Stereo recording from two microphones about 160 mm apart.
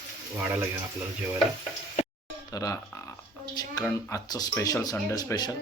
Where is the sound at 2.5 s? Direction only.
20° left (ahead or behind).